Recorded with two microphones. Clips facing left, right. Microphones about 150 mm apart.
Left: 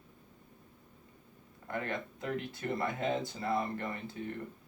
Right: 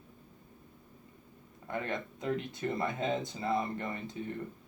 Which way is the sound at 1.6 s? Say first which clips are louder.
Right 1 dB; 20° right (ahead or behind).